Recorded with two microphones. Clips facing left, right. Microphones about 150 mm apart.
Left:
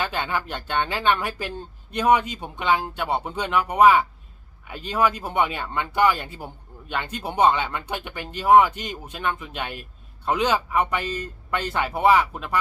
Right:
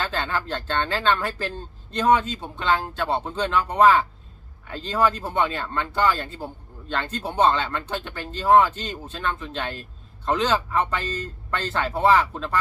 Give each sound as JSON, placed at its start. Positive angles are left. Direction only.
{"t": 0.0, "sound": "speech", "side_deg": 15}